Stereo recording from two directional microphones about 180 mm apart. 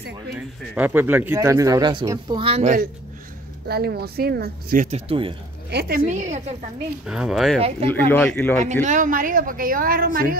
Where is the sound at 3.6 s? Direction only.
60° right (ahead or behind).